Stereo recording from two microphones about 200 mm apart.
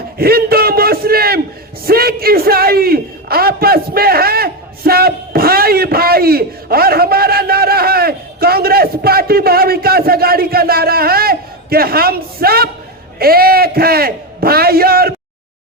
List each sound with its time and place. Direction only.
0.2 s a man's voice: 50° right (ahead or behind)